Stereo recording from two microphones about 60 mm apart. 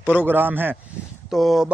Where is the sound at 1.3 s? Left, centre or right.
Centre.